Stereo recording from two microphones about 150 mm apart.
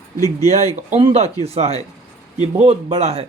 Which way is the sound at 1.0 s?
45° right (ahead or behind).